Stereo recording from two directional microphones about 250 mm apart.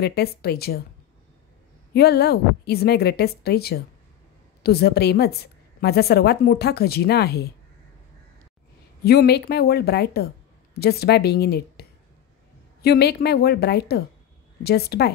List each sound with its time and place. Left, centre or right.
0.0 s a woman's voice: left
2.0 s a woman's voice: left
9.0 s a woman's voice: left
12.8 s a woman's voice: left